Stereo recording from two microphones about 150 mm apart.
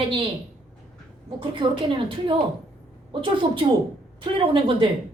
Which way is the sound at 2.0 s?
35° right (ahead or behind).